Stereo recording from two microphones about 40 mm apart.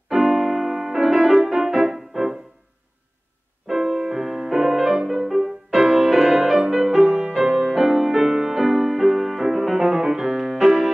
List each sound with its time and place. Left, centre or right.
0.1 s music: centre
3.6 s music: centre
7.6 s music: centre